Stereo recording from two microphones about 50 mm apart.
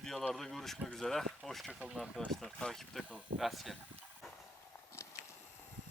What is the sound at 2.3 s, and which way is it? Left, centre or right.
Speech, centre.